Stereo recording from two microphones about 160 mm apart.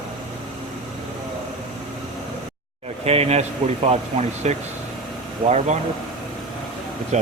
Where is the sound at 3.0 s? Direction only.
40° right (ahead or behind).